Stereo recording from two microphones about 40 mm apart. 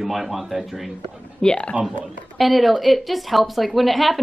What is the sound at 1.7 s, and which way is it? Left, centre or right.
Speech, right.